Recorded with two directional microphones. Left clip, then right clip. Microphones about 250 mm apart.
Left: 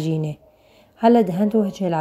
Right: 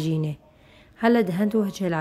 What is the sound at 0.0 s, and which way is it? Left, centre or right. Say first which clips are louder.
Speech: left 3 dB; centre.